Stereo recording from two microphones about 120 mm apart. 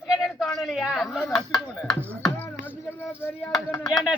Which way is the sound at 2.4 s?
15° left (ahead or behind).